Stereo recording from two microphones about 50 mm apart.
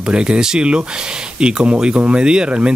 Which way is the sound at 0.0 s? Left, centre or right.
Centre.